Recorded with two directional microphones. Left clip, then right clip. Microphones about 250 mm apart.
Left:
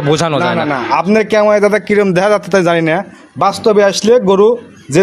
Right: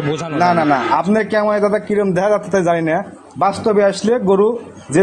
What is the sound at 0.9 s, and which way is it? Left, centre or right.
A man's voice, left.